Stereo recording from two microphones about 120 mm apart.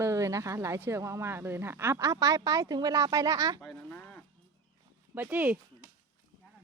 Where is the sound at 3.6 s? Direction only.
5° left (ahead or behind).